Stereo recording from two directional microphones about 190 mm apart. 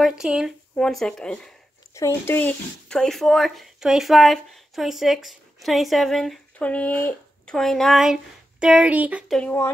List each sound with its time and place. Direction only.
0.0 s speech: 5° right (ahead or behind)
2.0 s speech: 15° left (ahead or behind); by 9.4 s 5° right (ahead or behind)
9.4 s speech: 10° left (ahead or behind)